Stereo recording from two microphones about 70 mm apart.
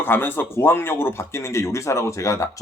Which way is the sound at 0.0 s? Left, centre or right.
Left.